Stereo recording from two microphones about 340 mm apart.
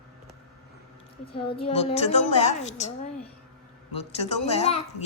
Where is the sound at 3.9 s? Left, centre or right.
Centre.